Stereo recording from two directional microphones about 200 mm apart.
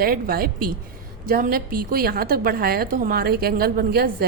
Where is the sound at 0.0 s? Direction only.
45° right (ahead or behind).